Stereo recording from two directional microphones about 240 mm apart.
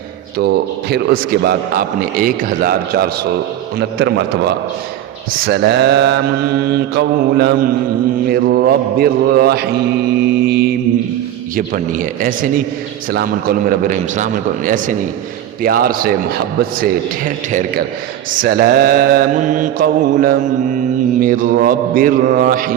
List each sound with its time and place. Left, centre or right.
0.3 s a man's voice: right
3.8 s mantra: right
8.3 s a man's voice: right